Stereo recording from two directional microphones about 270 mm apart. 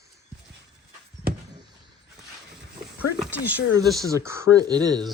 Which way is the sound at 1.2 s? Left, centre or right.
Right.